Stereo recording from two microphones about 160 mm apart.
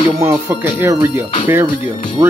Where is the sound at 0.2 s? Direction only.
15° right (ahead or behind).